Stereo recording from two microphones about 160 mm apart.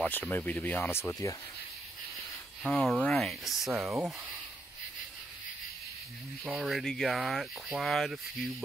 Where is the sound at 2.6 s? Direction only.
5° left (ahead or behind).